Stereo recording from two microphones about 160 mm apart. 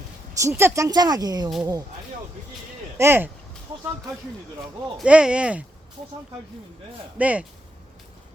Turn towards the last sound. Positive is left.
turn(degrees=-10)  # may be behind; listen again after turning